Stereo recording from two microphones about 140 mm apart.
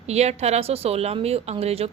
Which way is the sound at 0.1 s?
50° right (ahead or behind).